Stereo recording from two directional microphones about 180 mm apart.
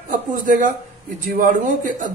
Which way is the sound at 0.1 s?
45° right (ahead or behind).